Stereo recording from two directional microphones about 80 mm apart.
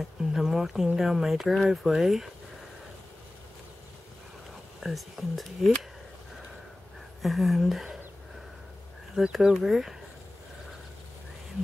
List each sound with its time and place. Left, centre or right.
0.2 s speech: centre
4.7 s speech: centre
7.2 s speech: centre
9.1 s speech: centre